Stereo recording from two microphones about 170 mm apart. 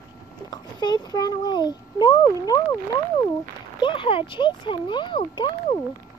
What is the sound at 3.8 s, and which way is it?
A child's voice, 30° left (ahead or behind).